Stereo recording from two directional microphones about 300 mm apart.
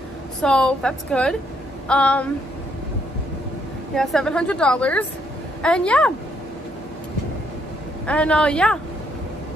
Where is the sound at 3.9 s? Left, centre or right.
Centre.